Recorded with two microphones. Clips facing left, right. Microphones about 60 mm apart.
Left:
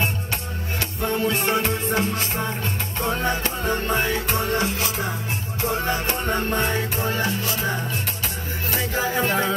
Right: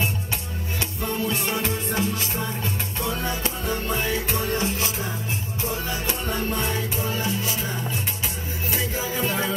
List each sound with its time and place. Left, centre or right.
1.0 s music: left